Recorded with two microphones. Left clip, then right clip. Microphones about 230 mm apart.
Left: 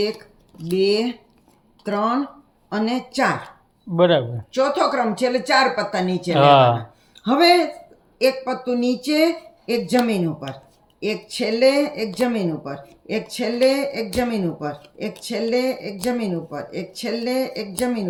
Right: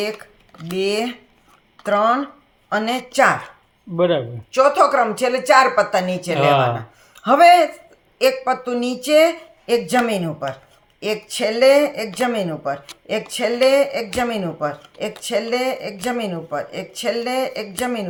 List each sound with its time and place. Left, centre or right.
0.7 s speech: right
3.9 s speech: centre
4.5 s speech: right
6.3 s speech: centre
7.2 s speech: right
11.0 s speech: right